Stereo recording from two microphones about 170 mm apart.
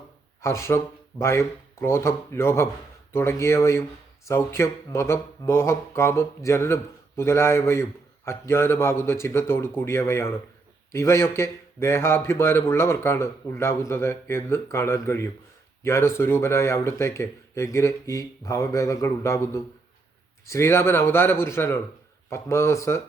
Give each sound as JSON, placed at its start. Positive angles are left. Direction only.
{"t": 0.4, "sound": "speech", "side_deg": 15}